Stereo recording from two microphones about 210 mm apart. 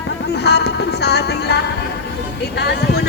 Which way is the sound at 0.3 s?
50° left (ahead or behind).